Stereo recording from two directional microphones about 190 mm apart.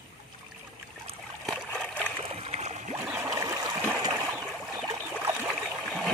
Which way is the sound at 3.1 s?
15° right (ahead or behind).